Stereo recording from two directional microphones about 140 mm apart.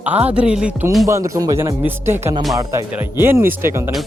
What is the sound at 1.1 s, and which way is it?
Speech, 20° right (ahead or behind).